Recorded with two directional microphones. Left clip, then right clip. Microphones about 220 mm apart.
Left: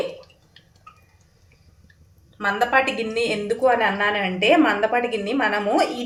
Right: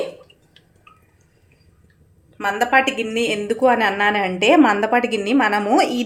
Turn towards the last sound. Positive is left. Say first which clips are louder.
# right 4 dB
turn(degrees=-45)  # may be behind; listen again after turning